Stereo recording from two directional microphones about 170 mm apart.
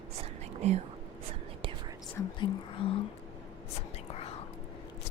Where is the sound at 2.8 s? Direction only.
30° left (ahead or behind).